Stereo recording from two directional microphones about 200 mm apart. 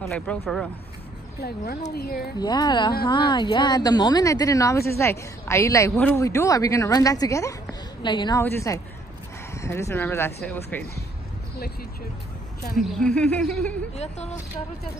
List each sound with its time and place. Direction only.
0.0 s speech: centre (ahead or behind)
2.0 s speech: 50° left (ahead or behind)
2.3 s a woman's voice: 20° left (ahead or behind)
12.7 s speech: 5° left (ahead or behind)
13.9 s speech: 35° left (ahead or behind)